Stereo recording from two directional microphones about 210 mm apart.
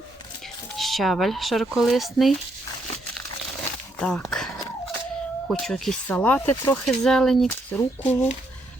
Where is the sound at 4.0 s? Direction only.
5° left (ahead or behind).